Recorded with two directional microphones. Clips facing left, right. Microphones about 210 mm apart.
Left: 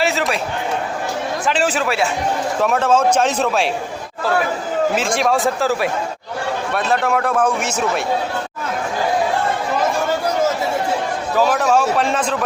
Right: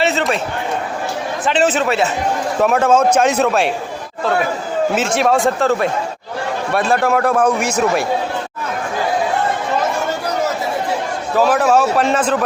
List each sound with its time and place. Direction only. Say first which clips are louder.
0.0 s a sound: right 2 dB; centre (ahead or behind)
1.5 s a man's voice: right 4 dB; centre (ahead or behind)
4.9 s a man's voice: right 2 dB; 5° right (ahead or behind)
7.1 s a man's voice: right 3 dB; 5° right (ahead or behind)
11.3 s a man's voice: right 3 dB; 5° right (ahead or behind)